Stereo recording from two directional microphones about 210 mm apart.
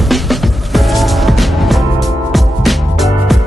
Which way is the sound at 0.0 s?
Centre (ahead or behind).